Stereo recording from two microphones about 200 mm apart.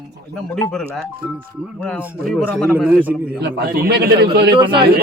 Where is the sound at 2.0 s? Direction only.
5° right (ahead or behind).